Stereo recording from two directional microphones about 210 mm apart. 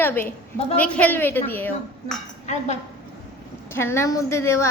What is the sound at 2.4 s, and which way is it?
Speech, 30° left (ahead or behind).